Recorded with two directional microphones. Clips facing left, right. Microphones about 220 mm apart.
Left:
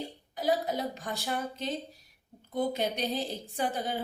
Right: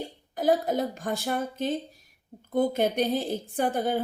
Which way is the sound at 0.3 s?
50° right (ahead or behind).